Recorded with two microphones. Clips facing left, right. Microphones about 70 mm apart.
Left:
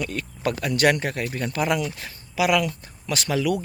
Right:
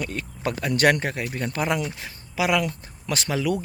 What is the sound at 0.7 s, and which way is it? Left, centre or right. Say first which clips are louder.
Speech: right 1 dB; right.